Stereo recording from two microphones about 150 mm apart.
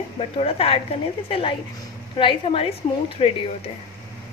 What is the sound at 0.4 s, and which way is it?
Speech, 40° left (ahead or behind).